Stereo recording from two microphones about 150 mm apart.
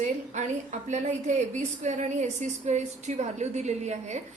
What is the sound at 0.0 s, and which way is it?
A woman's voice, 55° right (ahead or behind).